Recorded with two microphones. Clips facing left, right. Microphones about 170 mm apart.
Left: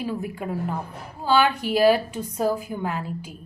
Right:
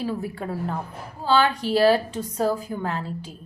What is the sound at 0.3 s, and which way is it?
A woman's voice, 10° left (ahead or behind).